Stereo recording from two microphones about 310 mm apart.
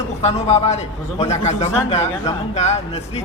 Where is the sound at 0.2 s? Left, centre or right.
Centre.